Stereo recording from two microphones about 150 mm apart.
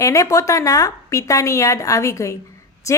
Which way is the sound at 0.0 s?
20° left (ahead or behind).